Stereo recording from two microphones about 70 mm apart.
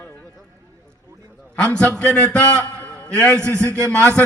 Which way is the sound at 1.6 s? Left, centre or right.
Centre.